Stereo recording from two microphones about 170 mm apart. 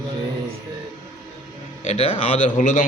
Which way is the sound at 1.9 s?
35° left (ahead or behind).